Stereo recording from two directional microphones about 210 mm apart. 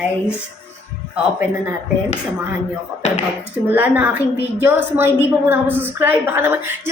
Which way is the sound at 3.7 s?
10° right (ahead or behind).